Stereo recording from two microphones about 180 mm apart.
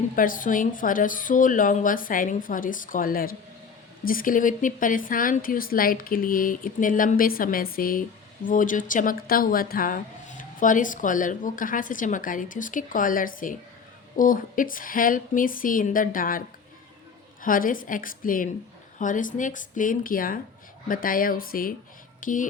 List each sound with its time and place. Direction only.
0.2 s speech: 50° left (ahead or behind)
17.4 s speech: 50° left (ahead or behind)